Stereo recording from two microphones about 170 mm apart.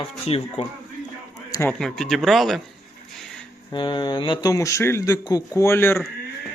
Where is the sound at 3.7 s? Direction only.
25° left (ahead or behind).